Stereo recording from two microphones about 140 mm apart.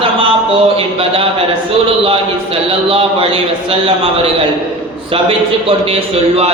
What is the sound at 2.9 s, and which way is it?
Speech, 40° right (ahead or behind).